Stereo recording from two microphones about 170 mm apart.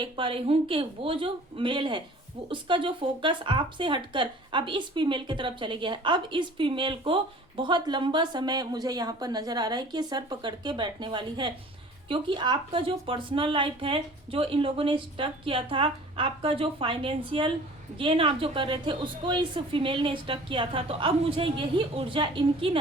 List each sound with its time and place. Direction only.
0.0 s speech: 30° right (ahead or behind)